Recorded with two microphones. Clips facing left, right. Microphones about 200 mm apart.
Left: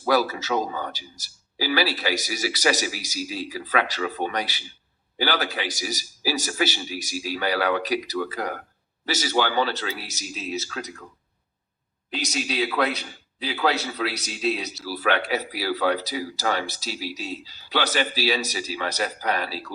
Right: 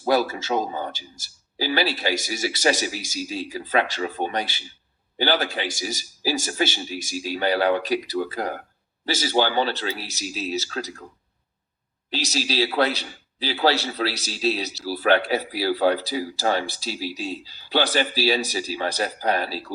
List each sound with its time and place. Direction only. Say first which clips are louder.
0.0 s a man's voice: right 1 dB; 25° right (ahead or behind)
12.1 s a man's voice: right 2 dB; 30° right (ahead or behind)